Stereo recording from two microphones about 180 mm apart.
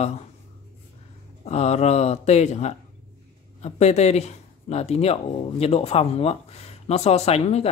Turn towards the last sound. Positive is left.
turn(degrees=35)  # may be behind; listen again after turning